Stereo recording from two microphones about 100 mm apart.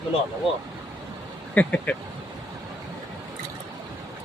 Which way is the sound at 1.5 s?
15° left (ahead or behind).